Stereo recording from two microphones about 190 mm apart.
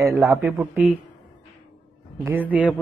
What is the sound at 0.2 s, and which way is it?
Speech, centre (ahead or behind).